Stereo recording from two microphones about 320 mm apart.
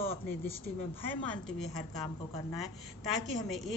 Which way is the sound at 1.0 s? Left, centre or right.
Centre.